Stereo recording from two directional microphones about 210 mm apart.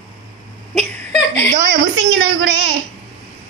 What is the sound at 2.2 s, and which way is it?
Speech, 70° right (ahead or behind).